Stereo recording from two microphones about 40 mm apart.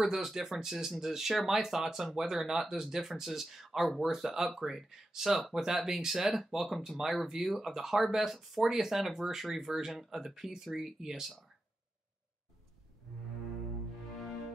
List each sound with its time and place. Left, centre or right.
0.0 s speech: centre